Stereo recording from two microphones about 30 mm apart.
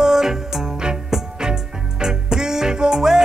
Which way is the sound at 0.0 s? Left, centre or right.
Centre.